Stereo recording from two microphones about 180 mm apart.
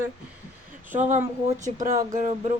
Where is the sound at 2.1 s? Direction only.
40° right (ahead or behind).